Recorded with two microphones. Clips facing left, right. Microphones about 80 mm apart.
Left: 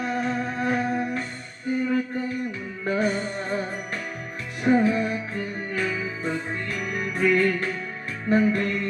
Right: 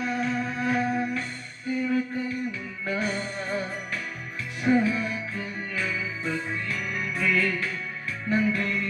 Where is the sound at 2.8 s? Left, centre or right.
Left.